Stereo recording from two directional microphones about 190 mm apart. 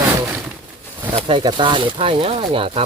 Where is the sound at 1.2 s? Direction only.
25° right (ahead or behind).